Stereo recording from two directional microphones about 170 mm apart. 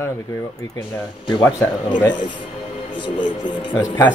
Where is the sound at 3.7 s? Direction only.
10° left (ahead or behind).